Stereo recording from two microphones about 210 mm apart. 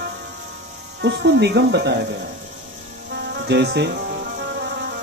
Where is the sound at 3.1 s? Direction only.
50° right (ahead or behind).